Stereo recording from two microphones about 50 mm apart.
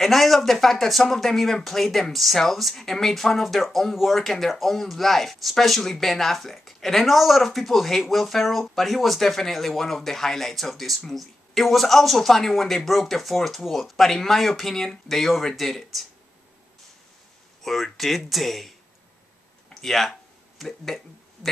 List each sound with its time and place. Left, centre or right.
0.0 s speech: centre
17.6 s speech: centre
19.7 s a sound: centre